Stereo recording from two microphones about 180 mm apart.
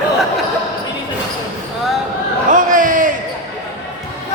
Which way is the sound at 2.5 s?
45° right (ahead or behind).